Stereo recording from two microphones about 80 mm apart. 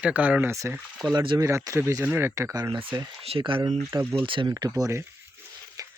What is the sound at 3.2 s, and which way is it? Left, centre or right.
Speech, right.